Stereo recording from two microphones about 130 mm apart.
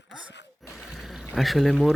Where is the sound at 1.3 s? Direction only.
Centre (ahead or behind).